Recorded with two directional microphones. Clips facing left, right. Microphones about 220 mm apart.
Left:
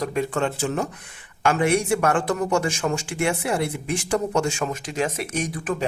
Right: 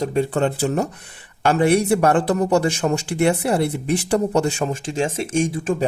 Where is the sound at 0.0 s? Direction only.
30° right (ahead or behind).